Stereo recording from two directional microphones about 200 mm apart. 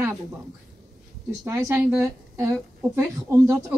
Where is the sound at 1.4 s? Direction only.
15° right (ahead or behind).